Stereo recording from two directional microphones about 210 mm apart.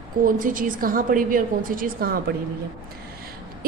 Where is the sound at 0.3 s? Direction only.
40° right (ahead or behind).